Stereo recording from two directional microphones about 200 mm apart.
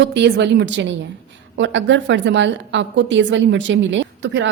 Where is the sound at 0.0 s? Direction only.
60° right (ahead or behind).